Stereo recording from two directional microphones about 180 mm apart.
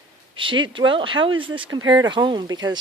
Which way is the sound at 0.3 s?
25° right (ahead or behind).